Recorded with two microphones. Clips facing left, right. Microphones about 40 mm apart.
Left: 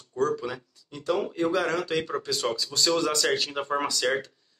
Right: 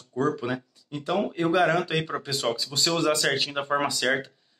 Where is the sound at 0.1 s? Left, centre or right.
Centre.